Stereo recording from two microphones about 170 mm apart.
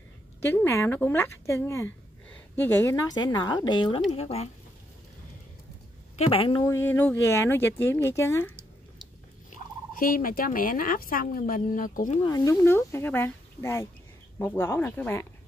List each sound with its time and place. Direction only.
0.6 s speech: 15° left (ahead or behind); by 4.5 s 35° left (ahead or behind)
6.1 s speech: 35° left (ahead or behind)
6.6 s speech: 15° left (ahead or behind)
9.5 s fowl: 55° left (ahead or behind)
12.2 s speech: 20° left (ahead or behind)